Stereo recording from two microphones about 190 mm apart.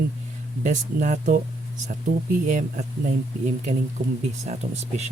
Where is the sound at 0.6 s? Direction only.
40° right (ahead or behind).